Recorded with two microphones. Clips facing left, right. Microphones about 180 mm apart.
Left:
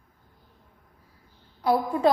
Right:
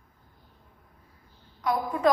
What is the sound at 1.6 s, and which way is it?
Speech, 30° left (ahead or behind).